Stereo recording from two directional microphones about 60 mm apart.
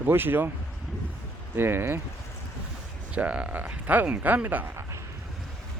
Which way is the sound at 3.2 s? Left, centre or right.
Right.